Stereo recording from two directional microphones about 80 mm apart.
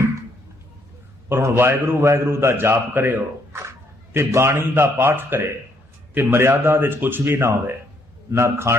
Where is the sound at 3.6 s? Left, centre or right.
Right.